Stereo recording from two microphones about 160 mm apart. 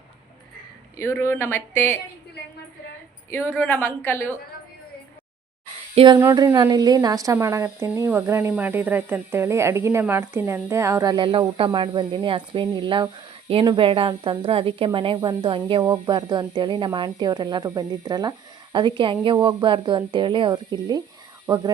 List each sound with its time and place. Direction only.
0.9 s speech: 15° left (ahead or behind)
3.2 s a woman's voice: 15° left (ahead or behind)
5.9 s speech: 35° right (ahead or behind)
6.1 s a woman's voice: 20° right (ahead or behind)